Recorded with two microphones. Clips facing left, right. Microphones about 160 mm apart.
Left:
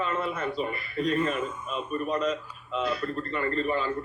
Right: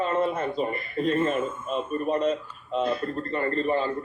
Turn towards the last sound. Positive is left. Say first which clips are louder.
# right 3 dB
turn(degrees=-35)  # may be behind; listen again after turning